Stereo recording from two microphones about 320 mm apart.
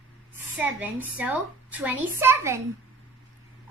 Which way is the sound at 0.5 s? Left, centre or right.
Centre.